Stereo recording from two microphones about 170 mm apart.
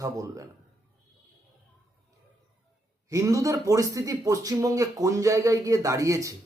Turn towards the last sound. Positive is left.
turn(degrees=-20)  # may be behind; listen again after turning